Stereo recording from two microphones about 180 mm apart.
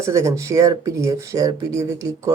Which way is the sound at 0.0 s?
15° right (ahead or behind).